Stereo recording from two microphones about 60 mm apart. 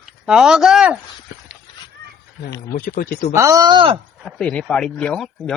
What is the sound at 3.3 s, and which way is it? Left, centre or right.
Speech, right.